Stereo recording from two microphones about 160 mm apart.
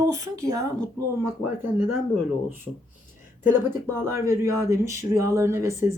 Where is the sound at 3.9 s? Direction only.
15° right (ahead or behind).